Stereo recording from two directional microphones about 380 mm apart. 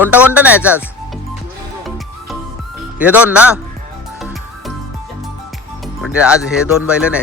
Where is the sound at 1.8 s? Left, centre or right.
Centre.